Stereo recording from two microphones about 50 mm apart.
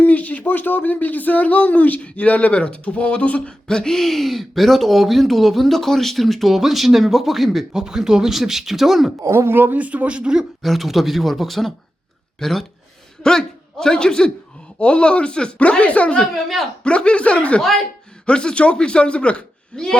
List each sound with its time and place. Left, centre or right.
0.0 s speech: left
3.7 s speech: centre
7.7 s speech: centre
9.3 s speech: right
9.7 s speech: right
10.6 s a man's voice: centre; by 16.2 s left
16.3 s speech: centre
16.8 s a man's voice: left